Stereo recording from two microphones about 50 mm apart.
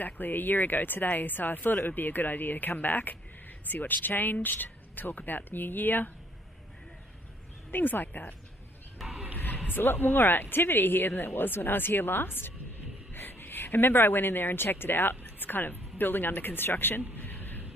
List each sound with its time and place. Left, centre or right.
0.0 s speech: left
7.7 s speech: left
8.9 s a sound: centre
9.7 s speech: left